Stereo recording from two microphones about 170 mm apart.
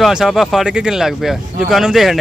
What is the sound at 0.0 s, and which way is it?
Speech, centre (ahead or behind).